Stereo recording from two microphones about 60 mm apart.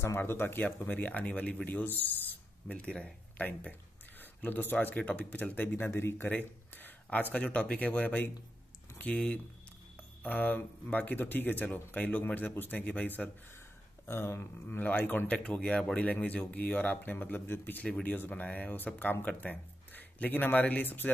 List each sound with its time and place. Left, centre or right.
0.0 s a sound: left
0.8 s speech: left
2.8 s speech: centre
4.2 s speech: left
14.0 s a sound: left
15.2 s speech: centre; by 21.1 s left